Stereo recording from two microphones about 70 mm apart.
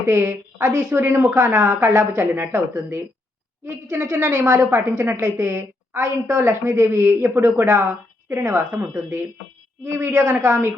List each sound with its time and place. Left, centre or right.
0.1 s a woman's voice: right